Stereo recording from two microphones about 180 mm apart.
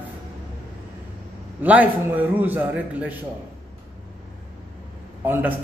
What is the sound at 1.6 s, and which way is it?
A man's voice, 10° right (ahead or behind).